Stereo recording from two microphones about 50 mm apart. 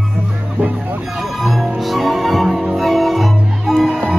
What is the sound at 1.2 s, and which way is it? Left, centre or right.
Music, centre.